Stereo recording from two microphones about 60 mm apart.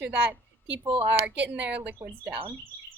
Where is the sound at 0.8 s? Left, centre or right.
Right.